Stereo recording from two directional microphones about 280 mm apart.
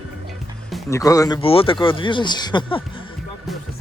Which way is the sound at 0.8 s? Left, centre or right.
Centre.